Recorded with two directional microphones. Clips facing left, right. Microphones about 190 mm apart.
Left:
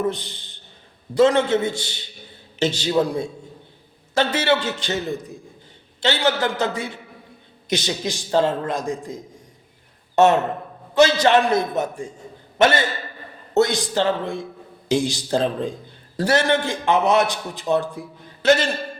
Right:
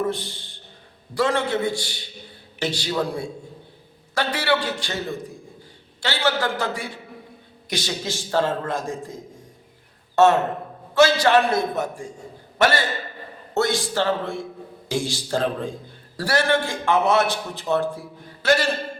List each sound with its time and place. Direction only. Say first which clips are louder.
0.1 s a man's voice: right 2 dB; 20° left (ahead or behind)
10.2 s a man's voice: left 1 dB; 20° left (ahead or behind)